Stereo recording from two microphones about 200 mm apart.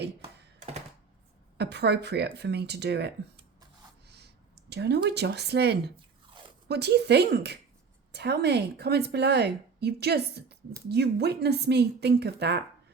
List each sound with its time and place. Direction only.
0.2 s a sound: 35° right (ahead or behind)
1.5 s a woman's voice: 55° right (ahead or behind)
4.7 s a woman's voice: 55° right (ahead or behind)